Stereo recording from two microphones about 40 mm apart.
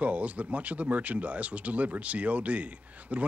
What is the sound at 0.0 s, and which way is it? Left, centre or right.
Speech, right.